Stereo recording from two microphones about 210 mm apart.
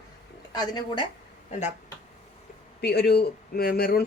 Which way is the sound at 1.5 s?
35° left (ahead or behind).